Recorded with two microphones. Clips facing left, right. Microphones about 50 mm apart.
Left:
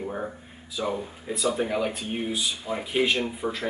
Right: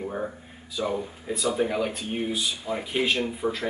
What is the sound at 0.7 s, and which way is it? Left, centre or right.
Speech, centre.